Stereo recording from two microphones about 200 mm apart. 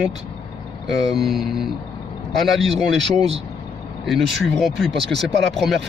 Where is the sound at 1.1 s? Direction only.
Centre (ahead or behind).